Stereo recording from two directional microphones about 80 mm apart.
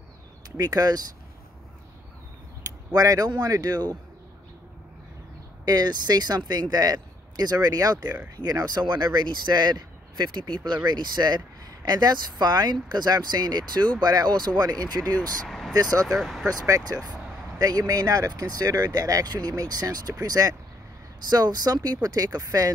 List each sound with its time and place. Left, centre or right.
0.6 s speech: right
2.6 s speech: right
5.7 s speech: right
8.8 s speech: right
15.1 s speech: centre
15.7 s speech: right
16.1 s speech: centre
16.4 s speech: right